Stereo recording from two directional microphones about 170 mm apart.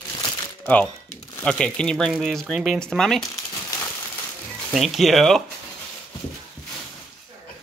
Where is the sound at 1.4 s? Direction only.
5° left (ahead or behind).